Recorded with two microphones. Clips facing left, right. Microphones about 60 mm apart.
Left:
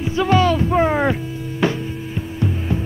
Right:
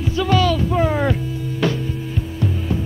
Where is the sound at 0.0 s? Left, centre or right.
Left.